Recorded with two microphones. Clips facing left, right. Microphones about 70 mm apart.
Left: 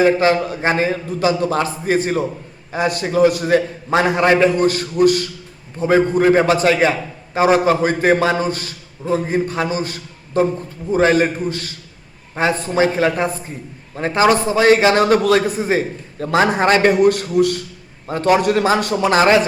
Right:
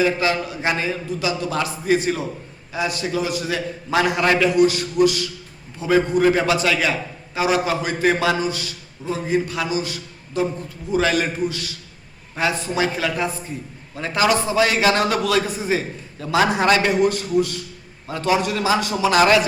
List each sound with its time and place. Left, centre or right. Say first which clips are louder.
0.0 s a man's voice: left 6 dB; left
3.8 s a man's voice: left 2 dB; left
16.9 s a man's voice: left 4 dB; left
18.1 s a man's voice: left 6 dB; left
19.1 s a man's voice: left 2 dB; left